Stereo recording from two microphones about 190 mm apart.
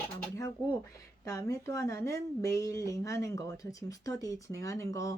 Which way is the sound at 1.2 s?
15° left (ahead or behind).